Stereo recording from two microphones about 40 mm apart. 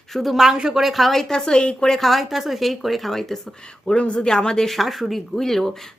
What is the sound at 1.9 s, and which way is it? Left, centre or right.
Speech, centre.